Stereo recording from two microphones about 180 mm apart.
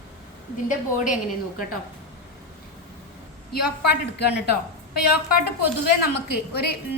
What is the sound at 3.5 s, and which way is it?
Speech, 65° left (ahead or behind).